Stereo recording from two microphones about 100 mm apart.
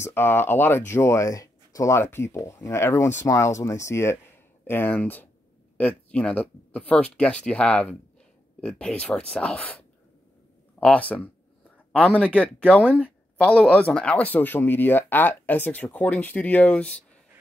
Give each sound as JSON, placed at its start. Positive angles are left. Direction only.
{"t": 0.0, "sound": "speech", "side_deg": 20}